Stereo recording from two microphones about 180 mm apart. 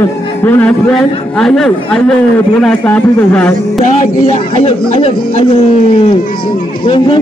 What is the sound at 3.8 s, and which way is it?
Speech, 40° left (ahead or behind).